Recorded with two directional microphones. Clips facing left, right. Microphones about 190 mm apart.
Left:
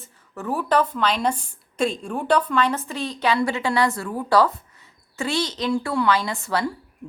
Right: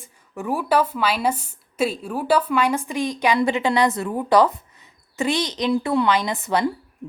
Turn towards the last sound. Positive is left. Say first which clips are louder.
# right 3 dB
turn(degrees=-20)  # may be behind; listen again after turning